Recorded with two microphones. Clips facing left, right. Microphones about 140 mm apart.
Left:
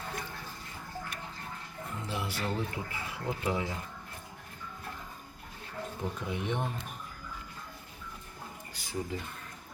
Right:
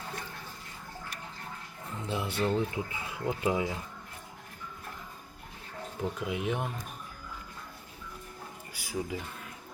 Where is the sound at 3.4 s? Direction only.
15° right (ahead or behind).